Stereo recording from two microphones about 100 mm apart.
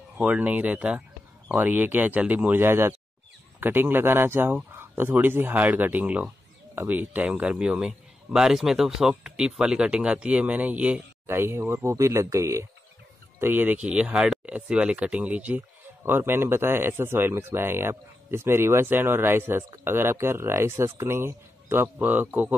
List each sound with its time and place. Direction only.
0.2 s a man's voice: 10° right (ahead or behind)
11.2 s speech: 25° right (ahead or behind)
13.8 s speech: 10° right (ahead or behind)